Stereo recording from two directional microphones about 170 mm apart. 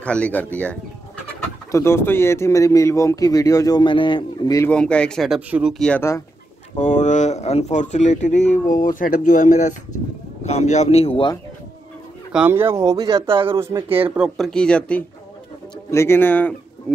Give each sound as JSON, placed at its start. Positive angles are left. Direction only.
{"t": 0.0, "sound": "speech", "side_deg": 5}
{"t": 4.6, "sound": "speech", "side_deg": 5}
{"t": 6.8, "sound": "speech", "side_deg": 45}
{"t": 12.3, "sound": "speech", "side_deg": -10}
{"t": 14.1, "sound": "speech", "side_deg": 0}
{"t": 16.9, "sound": "a sound", "side_deg": 5}